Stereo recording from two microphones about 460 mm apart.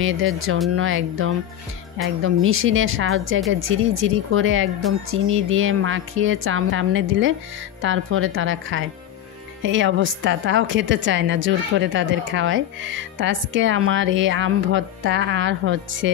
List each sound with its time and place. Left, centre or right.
0.0 s a woman's voice: right